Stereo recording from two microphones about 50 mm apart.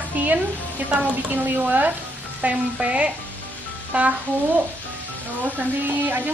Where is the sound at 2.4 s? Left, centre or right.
Right.